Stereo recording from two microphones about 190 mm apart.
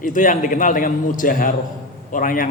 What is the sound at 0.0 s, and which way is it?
A man's voice, 45° left (ahead or behind).